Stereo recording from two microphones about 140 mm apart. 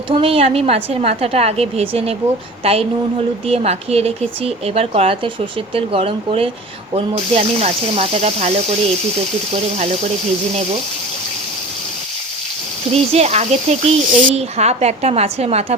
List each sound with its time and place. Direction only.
0.1 s speech: 40° right (ahead or behind)
9.7 s speech: 55° right (ahead or behind)
12.9 s speech: 50° right (ahead or behind)